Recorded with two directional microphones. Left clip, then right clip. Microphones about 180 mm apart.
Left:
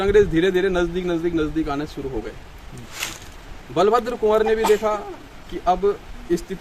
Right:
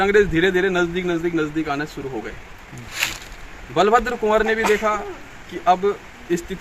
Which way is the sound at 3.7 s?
Centre (ahead or behind).